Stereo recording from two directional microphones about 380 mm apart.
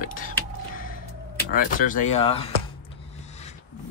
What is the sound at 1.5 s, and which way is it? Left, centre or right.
Speech, left.